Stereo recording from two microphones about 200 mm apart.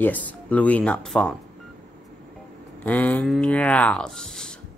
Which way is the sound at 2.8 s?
10° left (ahead or behind).